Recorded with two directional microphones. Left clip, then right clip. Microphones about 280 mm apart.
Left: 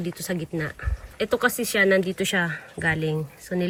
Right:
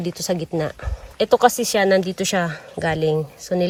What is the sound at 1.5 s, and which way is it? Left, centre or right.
Speech, centre.